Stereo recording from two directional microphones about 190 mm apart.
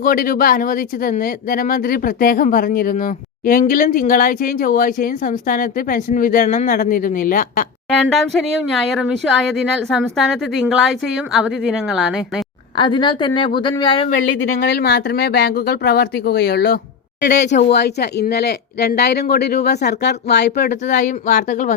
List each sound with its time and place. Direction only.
0.0 s speech: 50° left (ahead or behind)
8.0 s speech: centre (ahead or behind)
12.7 s a woman's voice: 25° left (ahead or behind)
14.1 s speech: 45° left (ahead or behind)
14.3 s speech: 60° left (ahead or behind)
20.7 s speech: 40° left (ahead or behind)